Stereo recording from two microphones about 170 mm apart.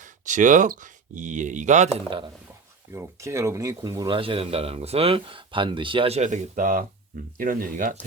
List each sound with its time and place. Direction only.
0.3 s speech: 50° right (ahead or behind)
2.0 s speech: 30° right (ahead or behind)
2.9 s speech: 15° right (ahead or behind); by 7.9 s 55° right (ahead or behind)